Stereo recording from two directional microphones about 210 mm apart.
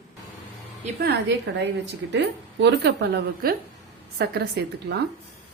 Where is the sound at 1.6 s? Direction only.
55° right (ahead or behind).